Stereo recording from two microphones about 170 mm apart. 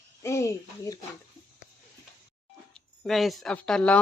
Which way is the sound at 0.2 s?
15° left (ahead or behind).